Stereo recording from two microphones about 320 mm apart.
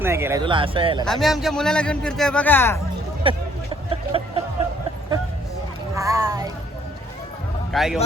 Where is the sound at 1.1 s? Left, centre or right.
Centre.